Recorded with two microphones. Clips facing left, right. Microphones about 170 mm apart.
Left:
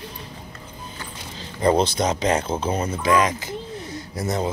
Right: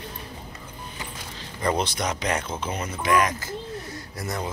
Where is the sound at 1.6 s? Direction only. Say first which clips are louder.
Left 6 dB; 30° left (ahead or behind).